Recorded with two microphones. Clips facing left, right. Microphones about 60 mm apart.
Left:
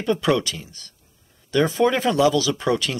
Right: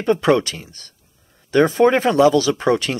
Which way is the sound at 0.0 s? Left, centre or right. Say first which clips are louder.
Right 4 dB; right.